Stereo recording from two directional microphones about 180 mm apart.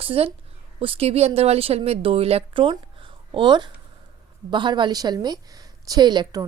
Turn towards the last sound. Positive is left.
turn(degrees=-25)  # may be behind; listen again after turning